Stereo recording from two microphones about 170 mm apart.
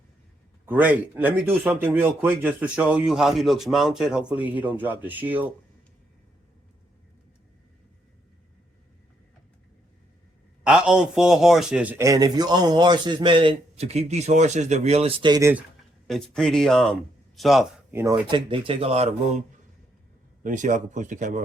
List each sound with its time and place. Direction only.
0.6 s a man's voice: 10° right (ahead or behind)
10.6 s a man's voice: 5° right (ahead or behind); by 15.3 s 35° right (ahead or behind)
15.3 s a man's voice: 15° right (ahead or behind)
16.0 s speech: 5° left (ahead or behind)
18.1 s speech: 30° right (ahead or behind)
20.4 s speech: 50° right (ahead or behind)